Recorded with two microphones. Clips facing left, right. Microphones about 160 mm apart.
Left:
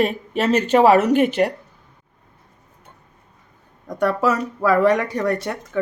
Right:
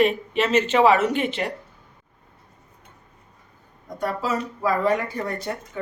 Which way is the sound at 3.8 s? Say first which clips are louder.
Left 7 dB; 75° left (ahead or behind).